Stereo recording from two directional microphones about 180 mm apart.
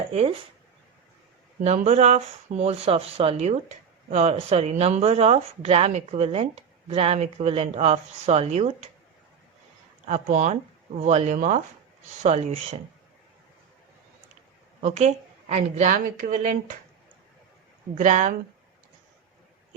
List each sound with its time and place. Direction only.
0.1 s speech: 35° right (ahead or behind)
1.6 s speech: 40° right (ahead or behind)
10.1 s speech: 40° right (ahead or behind)
14.8 s speech: 40° right (ahead or behind)
17.9 s speech: 40° right (ahead or behind)